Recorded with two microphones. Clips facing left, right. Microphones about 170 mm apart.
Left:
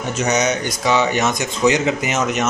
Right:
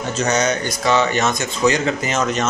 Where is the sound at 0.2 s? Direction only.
15° left (ahead or behind).